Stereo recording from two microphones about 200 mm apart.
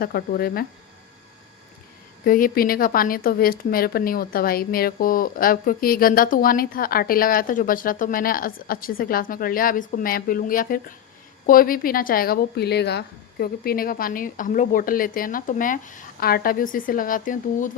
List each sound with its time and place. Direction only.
0.0 s a woman's voice: 50° left (ahead or behind)
2.2 s a woman's voice: 45° left (ahead or behind)